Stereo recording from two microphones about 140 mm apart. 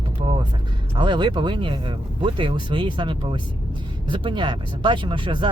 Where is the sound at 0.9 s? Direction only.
35° right (ahead or behind).